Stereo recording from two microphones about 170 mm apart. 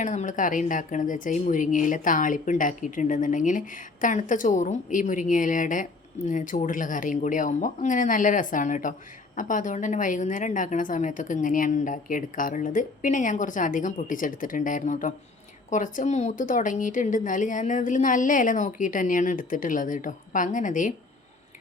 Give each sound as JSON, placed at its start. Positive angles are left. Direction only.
{"t": 0.0, "sound": "speech", "side_deg": 45}